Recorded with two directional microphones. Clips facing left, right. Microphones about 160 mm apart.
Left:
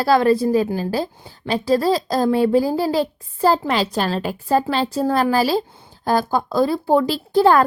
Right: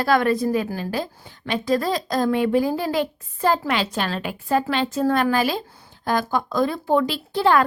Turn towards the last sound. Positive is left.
turn(degrees=40)  # may be behind; listen again after turning